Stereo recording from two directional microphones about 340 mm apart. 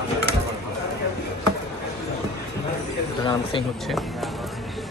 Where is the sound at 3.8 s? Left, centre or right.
Centre.